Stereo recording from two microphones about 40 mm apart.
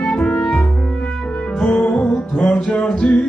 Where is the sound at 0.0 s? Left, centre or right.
Left.